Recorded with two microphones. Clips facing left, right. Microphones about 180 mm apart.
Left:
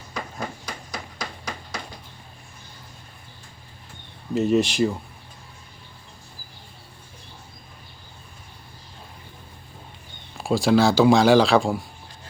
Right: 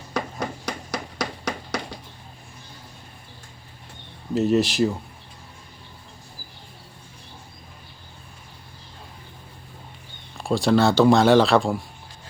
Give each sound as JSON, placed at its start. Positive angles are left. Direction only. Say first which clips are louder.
{"t": 0.1, "sound": "a sound", "louder": "right 4 dB", "side_deg": -80}
{"t": 4.4, "sound": "speech", "louder": "even", "side_deg": 0}
{"t": 10.3, "sound": "speech", "louder": "left 1 dB", "side_deg": 0}